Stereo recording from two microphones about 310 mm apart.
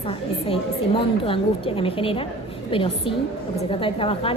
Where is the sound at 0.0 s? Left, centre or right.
Centre.